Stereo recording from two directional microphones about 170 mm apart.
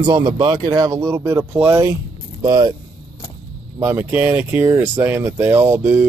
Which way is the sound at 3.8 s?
10° right (ahead or behind).